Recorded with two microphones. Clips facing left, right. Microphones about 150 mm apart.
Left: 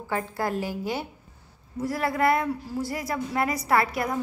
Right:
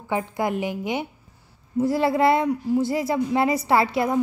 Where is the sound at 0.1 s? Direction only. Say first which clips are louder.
Right 4 dB; 15° right (ahead or behind).